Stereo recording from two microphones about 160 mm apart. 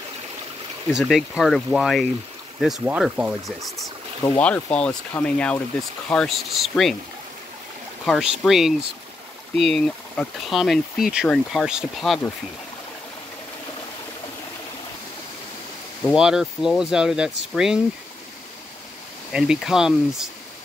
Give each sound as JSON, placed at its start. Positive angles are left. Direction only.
{"t": 0.8, "sound": "speech", "side_deg": 0}
{"t": 8.0, "sound": "speech", "side_deg": 0}
{"t": 16.1, "sound": "speech", "side_deg": -5}
{"t": 19.3, "sound": "speech", "side_deg": -5}